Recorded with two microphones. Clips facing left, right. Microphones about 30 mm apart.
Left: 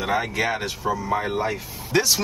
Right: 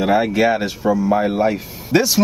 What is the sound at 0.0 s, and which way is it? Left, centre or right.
Speech, centre.